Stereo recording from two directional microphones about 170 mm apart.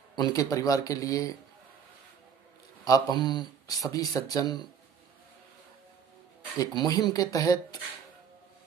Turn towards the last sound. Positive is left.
turn(degrees=20)  # may be behind; listen again after turning